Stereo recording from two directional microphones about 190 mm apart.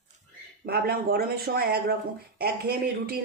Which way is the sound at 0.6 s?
55° right (ahead or behind).